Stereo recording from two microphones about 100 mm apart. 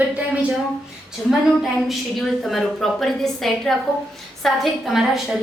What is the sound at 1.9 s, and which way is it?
A woman's voice, centre (ahead or behind).